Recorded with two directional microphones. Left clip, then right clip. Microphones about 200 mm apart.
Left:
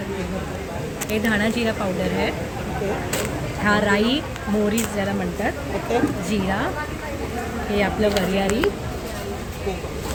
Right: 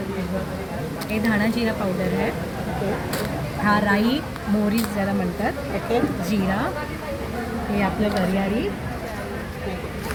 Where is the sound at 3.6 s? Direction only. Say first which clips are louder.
Left 1 dB; 15° left (ahead or behind).